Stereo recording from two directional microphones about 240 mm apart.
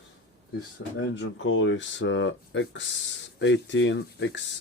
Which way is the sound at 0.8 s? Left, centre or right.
Left.